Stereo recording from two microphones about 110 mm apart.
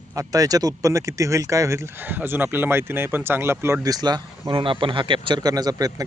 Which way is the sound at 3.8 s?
35° right (ahead or behind).